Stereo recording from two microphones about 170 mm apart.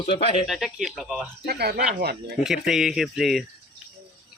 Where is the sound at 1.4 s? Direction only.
70° right (ahead or behind).